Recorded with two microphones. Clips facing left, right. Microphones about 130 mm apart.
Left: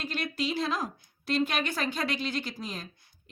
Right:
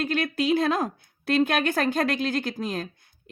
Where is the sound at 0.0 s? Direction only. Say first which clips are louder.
Right 7 dB; 55° right (ahead or behind).